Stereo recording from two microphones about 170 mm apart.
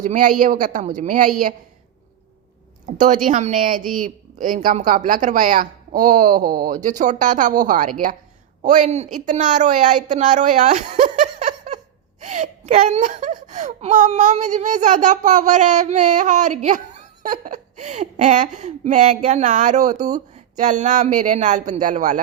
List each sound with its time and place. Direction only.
0.0 s speech: 50° right (ahead or behind)
2.8 s speech: 45° right (ahead or behind)
20.0 s speech: 20° right (ahead or behind)
20.3 s speech: 45° right (ahead or behind)